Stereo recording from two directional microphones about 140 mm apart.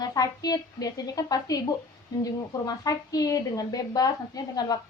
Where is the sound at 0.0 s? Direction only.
25° left (ahead or behind).